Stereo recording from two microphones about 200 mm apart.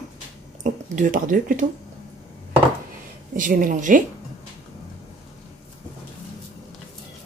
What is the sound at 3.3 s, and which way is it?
Speech, 40° right (ahead or behind).